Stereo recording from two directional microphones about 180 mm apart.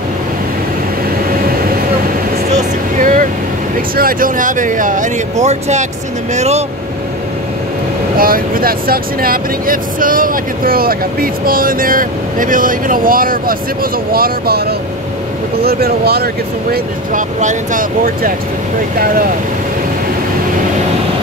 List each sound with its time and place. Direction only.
2.5 s vehicle: 45° right (ahead or behind)
3.9 s speech: 55° right (ahead or behind); by 6.6 s 40° right (ahead or behind)
8.2 s speech: 55° right (ahead or behind)
16.7 s speech: 45° right (ahead or behind)